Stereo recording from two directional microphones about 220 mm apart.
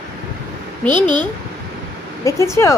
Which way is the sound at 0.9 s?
20° right (ahead or behind).